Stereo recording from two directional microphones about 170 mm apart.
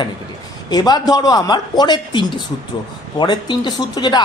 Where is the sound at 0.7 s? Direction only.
25° left (ahead or behind).